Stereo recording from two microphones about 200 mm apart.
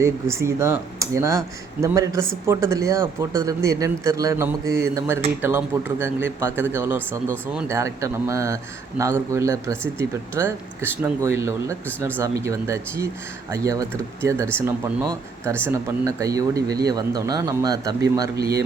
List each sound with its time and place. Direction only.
0.0 s a man's voice: 15° right (ahead or behind)